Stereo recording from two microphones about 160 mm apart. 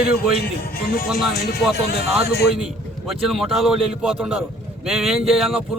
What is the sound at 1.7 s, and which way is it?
Speech, 80° left.